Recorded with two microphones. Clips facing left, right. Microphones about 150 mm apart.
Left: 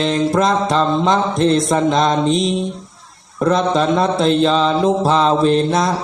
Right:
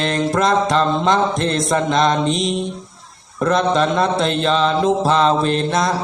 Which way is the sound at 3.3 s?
5° left (ahead or behind).